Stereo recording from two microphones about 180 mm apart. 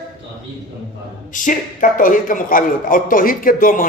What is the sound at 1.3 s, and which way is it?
A man's voice, 45° left (ahead or behind).